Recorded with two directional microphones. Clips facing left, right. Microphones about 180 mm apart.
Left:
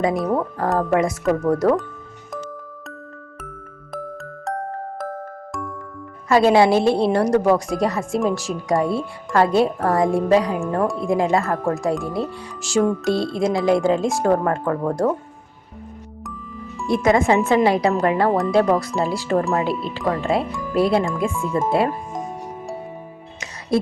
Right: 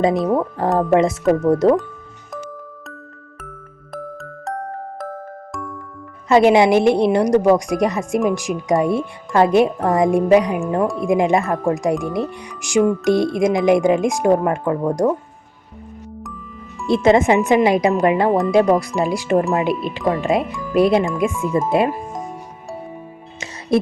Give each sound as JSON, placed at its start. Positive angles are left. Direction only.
{"t": 0.0, "sound": "speech", "side_deg": -25}
{"t": 3.9, "sound": "music", "side_deg": 0}
{"t": 6.2, "sound": "speech", "side_deg": -20}
{"t": 16.8, "sound": "speech", "side_deg": -25}
{"t": 23.4, "sound": "music", "side_deg": -25}